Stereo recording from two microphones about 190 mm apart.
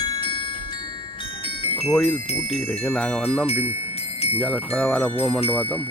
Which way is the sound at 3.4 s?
35° left (ahead or behind).